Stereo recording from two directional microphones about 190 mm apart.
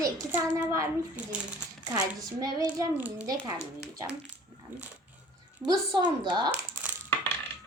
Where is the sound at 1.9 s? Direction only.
20° right (ahead or behind).